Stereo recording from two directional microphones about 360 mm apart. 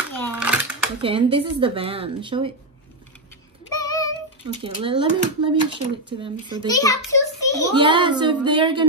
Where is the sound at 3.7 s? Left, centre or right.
Centre.